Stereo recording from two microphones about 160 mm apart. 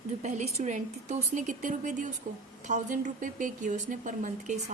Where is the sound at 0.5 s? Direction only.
45° right (ahead or behind).